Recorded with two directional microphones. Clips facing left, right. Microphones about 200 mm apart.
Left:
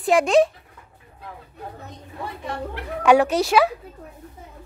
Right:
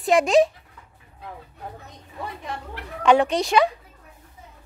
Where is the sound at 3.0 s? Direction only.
5° left (ahead or behind).